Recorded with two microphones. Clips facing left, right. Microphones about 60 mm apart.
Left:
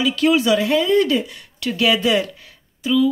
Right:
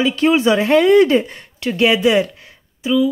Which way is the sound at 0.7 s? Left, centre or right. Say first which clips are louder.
Right 9 dB; right.